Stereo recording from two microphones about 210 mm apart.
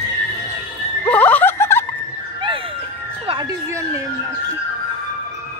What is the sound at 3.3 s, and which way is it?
Music, 20° right (ahead or behind).